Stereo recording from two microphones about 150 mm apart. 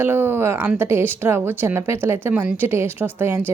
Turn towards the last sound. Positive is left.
turn(degrees=-15)  # may be behind; listen again after turning